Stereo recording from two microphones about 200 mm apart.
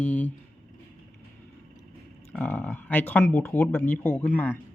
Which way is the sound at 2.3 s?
5° left (ahead or behind).